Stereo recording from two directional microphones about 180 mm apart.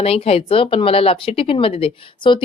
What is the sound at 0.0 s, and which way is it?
A woman's voice, 35° left (ahead or behind).